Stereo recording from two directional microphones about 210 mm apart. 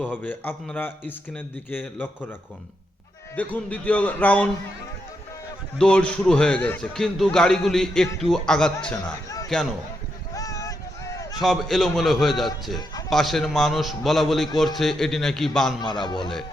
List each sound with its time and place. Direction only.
0.0 s speech: 5° left (ahead or behind)
3.3 s speech: 5° left (ahead or behind)
5.7 s a man's voice: 5° left (ahead or behind)
10.3 s a sound: 15° left (ahead or behind)
11.3 s a man's voice: centre (ahead or behind)
15.8 s a man's voice: 20° left (ahead or behind)